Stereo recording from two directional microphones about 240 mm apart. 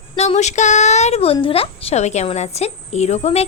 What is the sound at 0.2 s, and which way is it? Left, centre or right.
A woman's voice, left.